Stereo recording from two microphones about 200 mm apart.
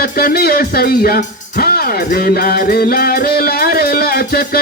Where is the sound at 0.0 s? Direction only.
50° left (ahead or behind).